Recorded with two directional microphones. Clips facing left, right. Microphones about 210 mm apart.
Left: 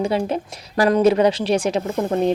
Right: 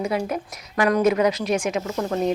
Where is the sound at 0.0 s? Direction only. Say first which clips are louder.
Left 4 dB; 30° left (ahead or behind).